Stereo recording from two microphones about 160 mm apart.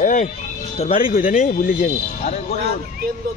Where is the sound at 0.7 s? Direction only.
40° left (ahead or behind).